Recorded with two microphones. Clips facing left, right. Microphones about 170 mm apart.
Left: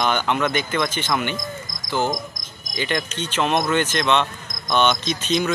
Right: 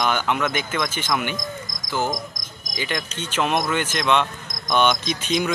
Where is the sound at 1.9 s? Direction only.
10° right (ahead or behind).